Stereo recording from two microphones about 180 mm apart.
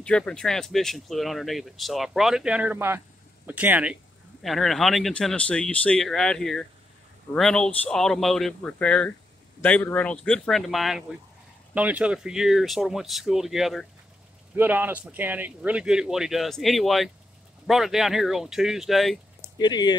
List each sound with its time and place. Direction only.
0.0 s speech: 5° left (ahead or behind)
19.6 s speech: 25° left (ahead or behind)